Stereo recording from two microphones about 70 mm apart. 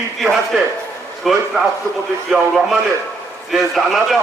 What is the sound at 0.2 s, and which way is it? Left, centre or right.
A man's voice, centre.